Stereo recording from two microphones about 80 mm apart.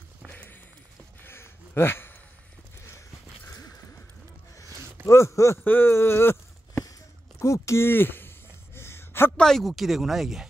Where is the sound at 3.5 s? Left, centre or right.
Left.